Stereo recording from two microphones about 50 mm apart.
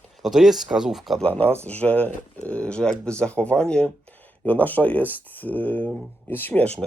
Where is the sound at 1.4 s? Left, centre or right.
Left.